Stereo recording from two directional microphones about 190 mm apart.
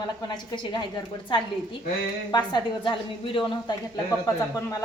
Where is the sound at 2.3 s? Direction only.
25° left (ahead or behind).